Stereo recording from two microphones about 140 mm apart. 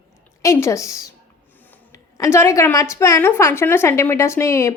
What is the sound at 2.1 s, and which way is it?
A woman's voice, 20° left (ahead or behind).